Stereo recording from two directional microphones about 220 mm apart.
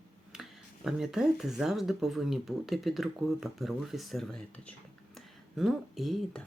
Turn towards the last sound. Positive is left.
turn(degrees=0)  # may be behind; listen again after turning